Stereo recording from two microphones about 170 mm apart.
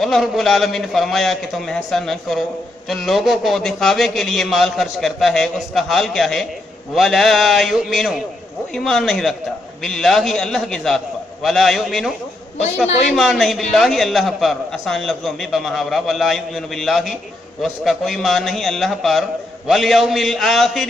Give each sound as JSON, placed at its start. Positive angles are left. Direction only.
{"t": 0.0, "sound": "a man's voice", "side_deg": 0}